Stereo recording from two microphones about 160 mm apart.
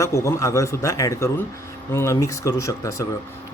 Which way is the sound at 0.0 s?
20° left (ahead or behind).